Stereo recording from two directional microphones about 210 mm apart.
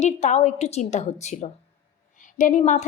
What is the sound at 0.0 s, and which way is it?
A woman's voice, 35° left (ahead or behind).